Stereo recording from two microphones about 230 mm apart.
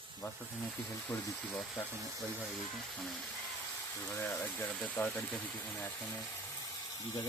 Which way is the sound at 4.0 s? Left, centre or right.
Centre.